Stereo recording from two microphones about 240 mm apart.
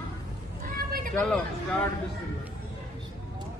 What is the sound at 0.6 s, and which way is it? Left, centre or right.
Vehicle, right.